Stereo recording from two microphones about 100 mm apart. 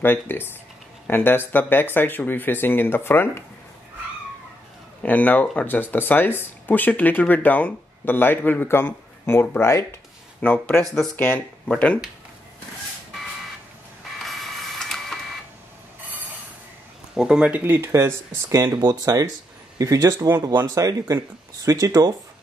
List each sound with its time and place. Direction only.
0.0 s speech: 20° left (ahead or behind)
5.0 s speech: 15° left (ahead or behind)
11.6 s speech: 10° left (ahead or behind)
14.1 s printer: centre (ahead or behind)
17.1 s speech: 5° right (ahead or behind)
17.7 s speech: 25° right (ahead or behind)
18.8 s speech: 40° right (ahead or behind)